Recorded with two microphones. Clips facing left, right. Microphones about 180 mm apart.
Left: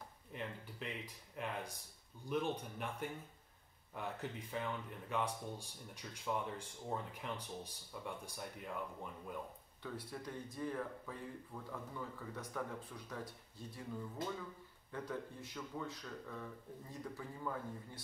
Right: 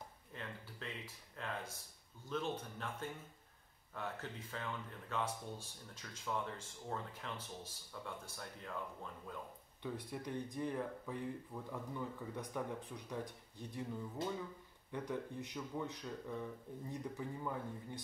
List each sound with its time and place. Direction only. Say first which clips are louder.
0.3 s speech: left 4 dB; 15° left (ahead or behind)
9.8 s speech: right 2 dB; 15° right (ahead or behind)
14.9 s speech: right 2 dB; 15° right (ahead or behind)